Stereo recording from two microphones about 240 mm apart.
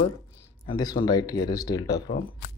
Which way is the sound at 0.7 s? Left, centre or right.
Centre.